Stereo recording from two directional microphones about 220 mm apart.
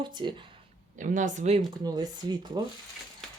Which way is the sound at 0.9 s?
35° right (ahead or behind).